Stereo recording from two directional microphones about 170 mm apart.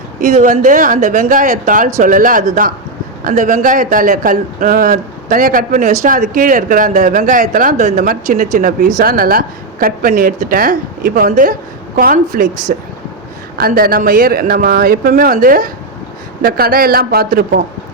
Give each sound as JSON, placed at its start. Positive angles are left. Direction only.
{"t": 0.2, "sound": "a man's voice", "side_deg": -45}